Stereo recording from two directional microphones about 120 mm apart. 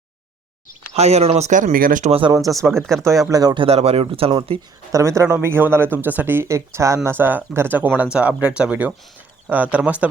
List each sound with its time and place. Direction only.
0.9 s speech: 60° right (ahead or behind); by 2.1 s 85° right
2.5 s speech: centre (ahead or behind)
3.2 s speech: 30° right (ahead or behind)
3.6 s speech: 60° right (ahead or behind)
4.9 s speech: 25° right (ahead or behind)